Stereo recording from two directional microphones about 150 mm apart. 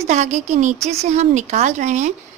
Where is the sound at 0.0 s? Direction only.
50° right (ahead or behind).